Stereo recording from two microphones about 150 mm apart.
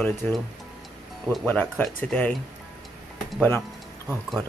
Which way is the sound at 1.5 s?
10° left (ahead or behind).